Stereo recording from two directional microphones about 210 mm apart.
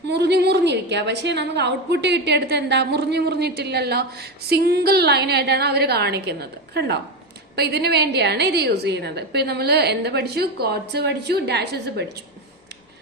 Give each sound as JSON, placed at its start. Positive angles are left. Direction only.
{"t": 0.1, "sound": "a woman's voice", "side_deg": -55}